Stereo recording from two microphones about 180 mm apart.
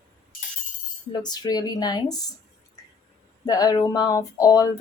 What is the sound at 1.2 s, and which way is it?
Speech, 20° left (ahead or behind).